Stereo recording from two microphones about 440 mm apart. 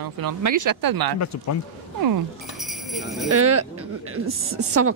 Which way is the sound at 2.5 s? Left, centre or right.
Centre.